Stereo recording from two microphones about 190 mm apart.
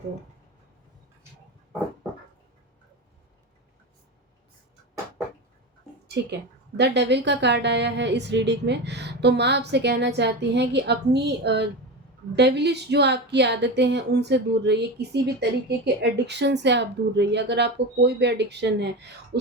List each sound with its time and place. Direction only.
6.7 s speech: 65° right (ahead or behind)